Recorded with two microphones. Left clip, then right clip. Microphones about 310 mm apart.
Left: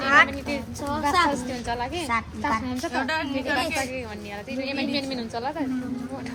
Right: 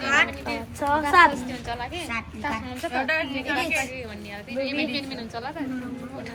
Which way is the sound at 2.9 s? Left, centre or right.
Centre.